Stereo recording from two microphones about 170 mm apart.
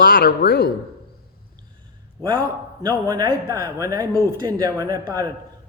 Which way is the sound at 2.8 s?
25° right (ahead or behind).